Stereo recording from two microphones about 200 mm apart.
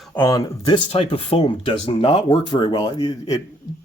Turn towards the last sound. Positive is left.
turn(degrees=20)  # may be behind; listen again after turning